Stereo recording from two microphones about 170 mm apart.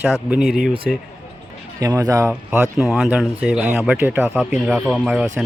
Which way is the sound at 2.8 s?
5° right (ahead or behind).